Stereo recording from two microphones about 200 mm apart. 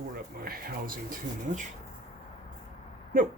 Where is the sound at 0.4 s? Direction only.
45° right (ahead or behind).